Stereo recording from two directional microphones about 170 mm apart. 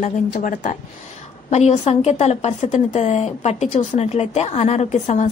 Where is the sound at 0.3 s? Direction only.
50° left (ahead or behind).